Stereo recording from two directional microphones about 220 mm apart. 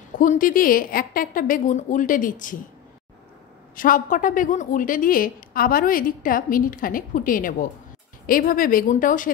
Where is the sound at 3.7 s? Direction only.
40° left (ahead or behind).